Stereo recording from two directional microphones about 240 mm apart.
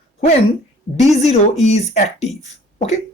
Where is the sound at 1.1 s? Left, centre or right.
Left.